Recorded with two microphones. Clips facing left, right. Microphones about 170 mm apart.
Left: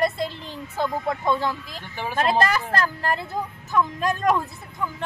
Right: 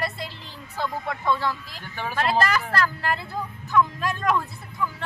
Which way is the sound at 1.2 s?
20° left (ahead or behind).